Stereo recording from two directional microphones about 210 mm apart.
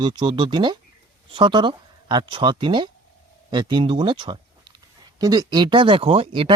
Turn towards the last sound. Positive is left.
turn(degrees=-30)  # may be behind; listen again after turning